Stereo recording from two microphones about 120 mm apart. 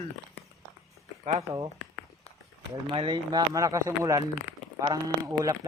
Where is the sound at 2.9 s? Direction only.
40° right (ahead or behind).